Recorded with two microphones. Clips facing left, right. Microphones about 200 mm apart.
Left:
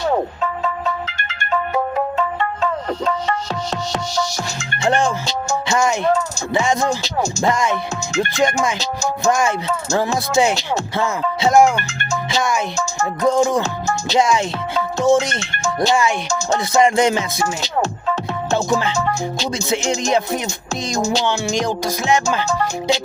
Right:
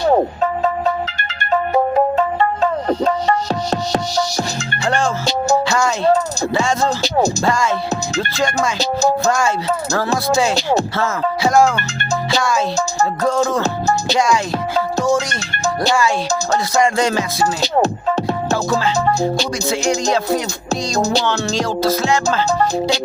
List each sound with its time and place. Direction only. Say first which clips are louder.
1.7 s music: right 7 dB; 40° right (ahead or behind)
4.9 s music: left 1 dB; 20° left (ahead or behind)
8.8 s speech: right 5 dB; 35° right (ahead or behind)
10.9 s music: right 1 dB; 20° left (ahead or behind)
13.6 s music: right 3 dB; 35° right (ahead or behind)
15.0 s music: left 2 dB; 25° left (ahead or behind)
17.4 s speech: right 5 dB; 35° right (ahead or behind)
18.5 s speech: left 1 dB; 20° left (ahead or behind)
18.9 s speech: right 5 dB; 35° right (ahead or behind)
19.7 s music: right 1 dB; 20° left (ahead or behind)
22.4 s speech: right 3 dB; 35° right (ahead or behind)